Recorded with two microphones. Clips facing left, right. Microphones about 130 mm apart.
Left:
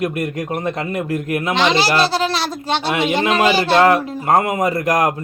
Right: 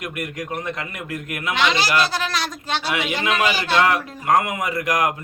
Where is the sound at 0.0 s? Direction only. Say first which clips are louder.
Left 8 dB; 30° left (ahead or behind).